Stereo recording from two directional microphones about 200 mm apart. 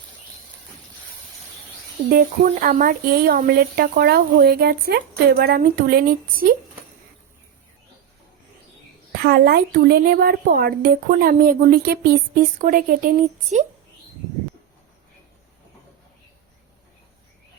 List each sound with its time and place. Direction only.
2.1 s a woman's voice: 45° right (ahead or behind)
9.1 s a woman's voice: 50° right (ahead or behind)